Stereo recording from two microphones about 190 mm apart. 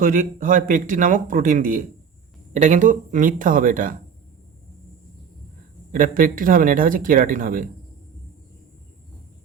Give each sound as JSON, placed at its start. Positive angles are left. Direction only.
{"t": 0.0, "sound": "speech", "side_deg": -45}
{"t": 5.9, "sound": "speech", "side_deg": -45}